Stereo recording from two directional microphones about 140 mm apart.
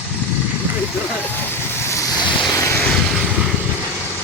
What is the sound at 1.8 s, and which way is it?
Vehicle, 20° left (ahead or behind).